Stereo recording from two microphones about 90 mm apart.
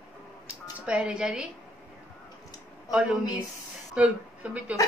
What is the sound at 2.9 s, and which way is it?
Speech, 10° right (ahead or behind).